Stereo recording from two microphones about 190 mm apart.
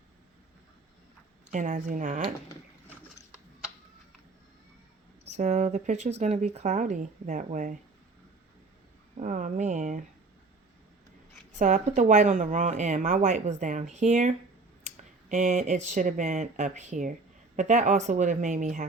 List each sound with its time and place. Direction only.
1.5 s speech: 40° right (ahead or behind)
5.2 s speech: 40° right (ahead or behind)
9.1 s speech: 40° right (ahead or behind)
11.3 s speech: 40° right (ahead or behind)